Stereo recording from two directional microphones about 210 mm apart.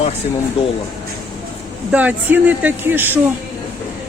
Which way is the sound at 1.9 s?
5° right (ahead or behind).